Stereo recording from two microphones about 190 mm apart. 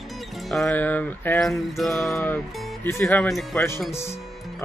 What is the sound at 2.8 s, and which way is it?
Speech, 10° left (ahead or behind).